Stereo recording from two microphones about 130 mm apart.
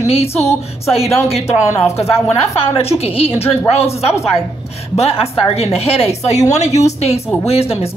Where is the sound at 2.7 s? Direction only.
50° left (ahead or behind).